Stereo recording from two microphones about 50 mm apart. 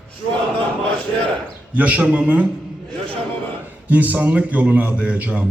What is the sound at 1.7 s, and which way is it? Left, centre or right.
Speech, right.